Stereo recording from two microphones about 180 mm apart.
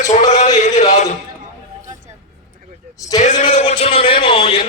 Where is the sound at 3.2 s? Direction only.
40° left (ahead or behind).